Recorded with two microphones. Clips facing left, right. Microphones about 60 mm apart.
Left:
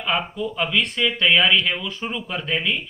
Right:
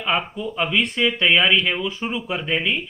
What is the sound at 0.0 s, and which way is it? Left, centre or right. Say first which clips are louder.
Speech: right 1 dB; centre.